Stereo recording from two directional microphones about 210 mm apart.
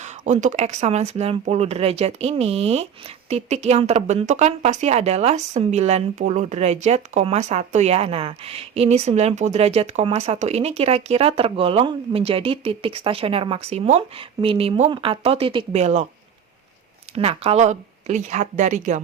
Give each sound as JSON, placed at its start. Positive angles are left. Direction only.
{"t": 0.0, "sound": "speech", "side_deg": -35}
{"t": 17.2, "sound": "speech", "side_deg": -30}